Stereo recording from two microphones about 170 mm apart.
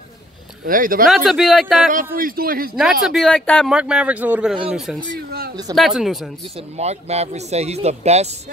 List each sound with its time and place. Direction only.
0.7 s a man's voice: 55° right (ahead or behind)
1.0 s speech: centre (ahead or behind)
2.1 s a man's voice: 60° right (ahead or behind)
2.7 s speech: centre (ahead or behind)
3.7 s speech: 5° right (ahead or behind)
6.8 s speech: 40° right (ahead or behind)